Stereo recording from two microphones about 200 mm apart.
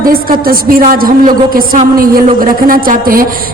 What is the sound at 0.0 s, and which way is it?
A woman's voice, 45° right (ahead or behind).